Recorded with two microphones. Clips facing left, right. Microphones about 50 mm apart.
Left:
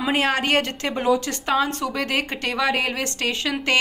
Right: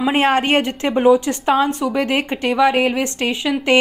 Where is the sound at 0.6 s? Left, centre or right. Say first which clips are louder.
Right 6 dB; right.